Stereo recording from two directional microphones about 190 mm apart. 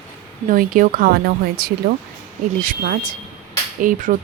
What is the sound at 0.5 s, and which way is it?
Speech, 45° right (ahead or behind).